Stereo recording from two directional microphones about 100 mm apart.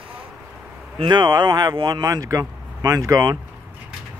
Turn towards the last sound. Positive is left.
turn(degrees=-40)  # may be behind; listen again after turning